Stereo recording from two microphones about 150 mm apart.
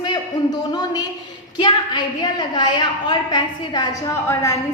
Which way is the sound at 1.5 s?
30° left (ahead or behind).